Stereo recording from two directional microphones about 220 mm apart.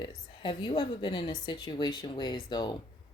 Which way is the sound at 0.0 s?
20° left (ahead or behind).